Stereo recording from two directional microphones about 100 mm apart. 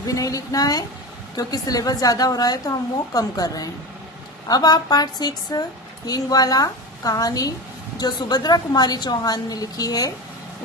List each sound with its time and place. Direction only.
0.0 s a woman's voice: 35° left (ahead or behind)